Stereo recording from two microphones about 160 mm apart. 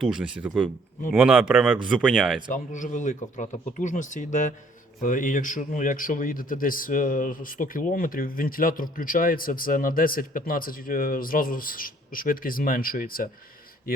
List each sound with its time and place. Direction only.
0.0 s speech: 5° right (ahead or behind)
2.5 s a man's voice: 50° left (ahead or behind)